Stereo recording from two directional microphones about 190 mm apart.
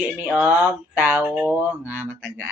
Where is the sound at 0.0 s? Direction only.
5° right (ahead or behind).